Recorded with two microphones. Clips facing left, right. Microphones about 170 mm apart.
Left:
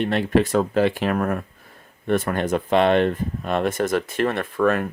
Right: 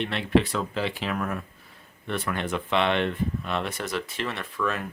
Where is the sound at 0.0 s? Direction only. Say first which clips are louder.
Left 4 dB; 45° left (ahead or behind).